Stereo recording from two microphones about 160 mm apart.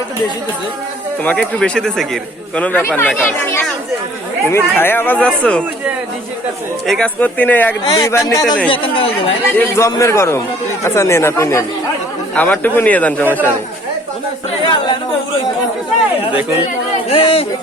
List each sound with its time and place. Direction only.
1.2 s speech: 10° left (ahead or behind)
4.4 s speech: 15° left (ahead or behind)
6.8 s speech: 5° left (ahead or behind)
7.9 s speech: 25° left (ahead or behind)
8.7 s speech: 35° left (ahead or behind)
9.5 s speech: 15° left (ahead or behind)
17.1 s speech: 35° left (ahead or behind)